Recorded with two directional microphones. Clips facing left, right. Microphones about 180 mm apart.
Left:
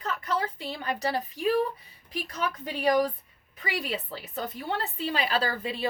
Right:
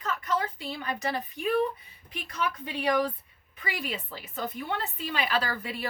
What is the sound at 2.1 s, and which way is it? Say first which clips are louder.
A woman's voice: left 1 dB; 35° left (ahead or behind).